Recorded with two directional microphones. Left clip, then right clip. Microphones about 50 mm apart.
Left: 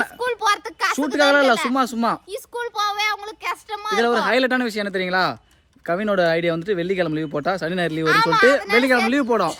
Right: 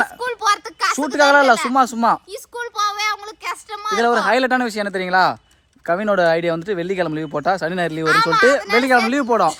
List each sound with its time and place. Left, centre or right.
0.2 s a sound: left
1.1 s speech: right
2.3 s child singing: left
4.0 s speech: right
8.0 s a child's voice: left
8.9 s speech: centre